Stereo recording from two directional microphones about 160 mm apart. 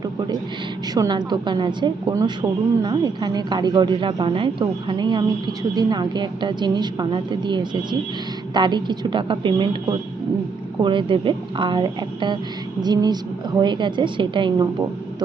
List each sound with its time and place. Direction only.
0.9 s a woman's voice: 25° right (ahead or behind)
10.8 s a woman's voice: 30° right (ahead or behind)